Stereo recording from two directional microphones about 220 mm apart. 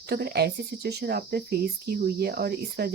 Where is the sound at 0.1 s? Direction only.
45° right (ahead or behind).